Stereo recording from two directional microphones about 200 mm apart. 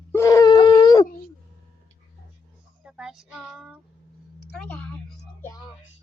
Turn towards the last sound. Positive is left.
turn(degrees=5)  # may be behind; listen again after turning